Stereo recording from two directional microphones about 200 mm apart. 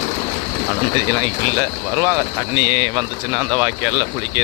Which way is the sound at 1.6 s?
15° right (ahead or behind).